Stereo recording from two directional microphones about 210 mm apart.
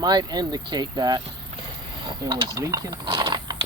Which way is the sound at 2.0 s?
20° right (ahead or behind).